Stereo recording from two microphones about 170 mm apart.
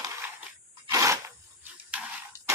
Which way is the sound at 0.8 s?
15° right (ahead or behind).